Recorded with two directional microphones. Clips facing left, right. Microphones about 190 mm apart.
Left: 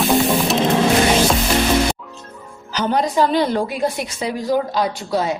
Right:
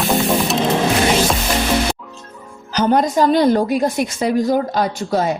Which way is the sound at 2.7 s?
45° right (ahead or behind).